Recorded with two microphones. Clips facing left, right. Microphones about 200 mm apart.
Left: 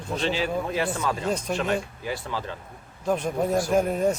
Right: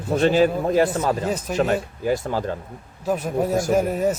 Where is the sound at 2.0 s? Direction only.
45° right (ahead or behind).